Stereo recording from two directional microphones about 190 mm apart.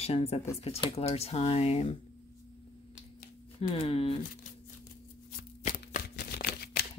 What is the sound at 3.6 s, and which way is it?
Speech, 30° left (ahead or behind).